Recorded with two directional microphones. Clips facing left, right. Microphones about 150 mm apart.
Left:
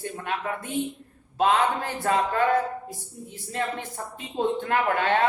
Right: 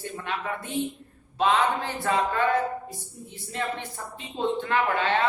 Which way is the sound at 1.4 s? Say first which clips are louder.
Left 1 dB; 45° left (ahead or behind).